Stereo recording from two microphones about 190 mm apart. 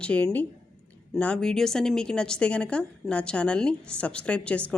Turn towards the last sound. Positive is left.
turn(degrees=5)  # may be behind; listen again after turning